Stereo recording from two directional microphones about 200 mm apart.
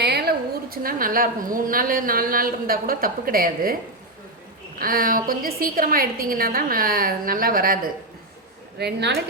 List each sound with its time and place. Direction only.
0.0 s a woman's voice: 55° right (ahead or behind)
4.8 s a woman's voice: 45° right (ahead or behind)
8.8 s speech: 55° right (ahead or behind)